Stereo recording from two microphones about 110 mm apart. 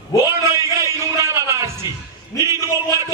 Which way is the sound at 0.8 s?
25° right (ahead or behind).